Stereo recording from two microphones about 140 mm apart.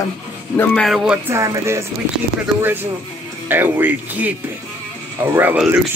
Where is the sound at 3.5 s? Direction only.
15° right (ahead or behind).